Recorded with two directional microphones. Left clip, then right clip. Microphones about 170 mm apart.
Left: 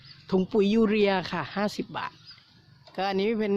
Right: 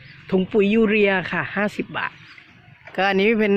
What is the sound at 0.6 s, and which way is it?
Speech, 30° left (ahead or behind).